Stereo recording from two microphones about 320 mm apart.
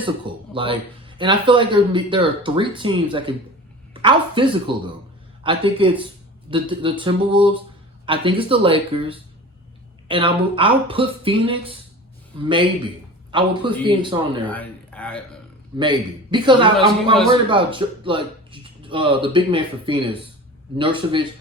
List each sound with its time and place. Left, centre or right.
0.0 s speech: centre
14.4 s speech: centre
15.8 s speech: centre